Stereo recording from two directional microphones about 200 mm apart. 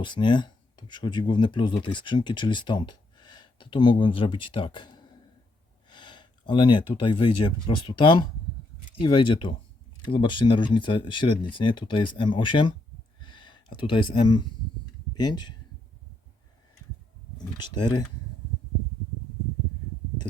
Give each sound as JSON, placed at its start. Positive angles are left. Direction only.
{"t": 0.0, "sound": "speech", "side_deg": 25}
{"t": 13.1, "sound": "a sound", "side_deg": 25}
{"t": 15.2, "sound": "speech", "side_deg": 20}
{"t": 17.6, "sound": "speech", "side_deg": 20}